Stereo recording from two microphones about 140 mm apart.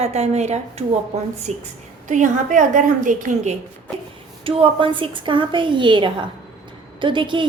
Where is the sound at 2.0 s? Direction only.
65° right (ahead or behind).